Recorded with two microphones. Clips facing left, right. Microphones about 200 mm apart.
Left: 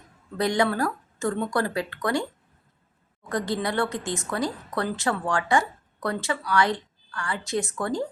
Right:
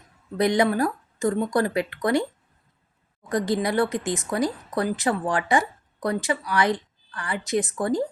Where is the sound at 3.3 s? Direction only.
20° right (ahead or behind).